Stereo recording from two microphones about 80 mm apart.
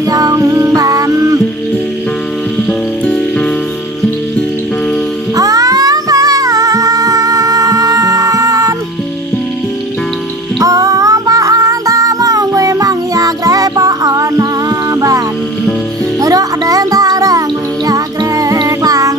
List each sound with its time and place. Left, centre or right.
0.0 s music: right
5.3 s music: right
10.6 s music: right